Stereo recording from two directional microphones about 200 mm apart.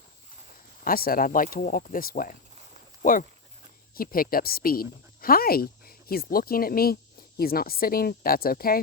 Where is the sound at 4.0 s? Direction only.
45° left (ahead or behind).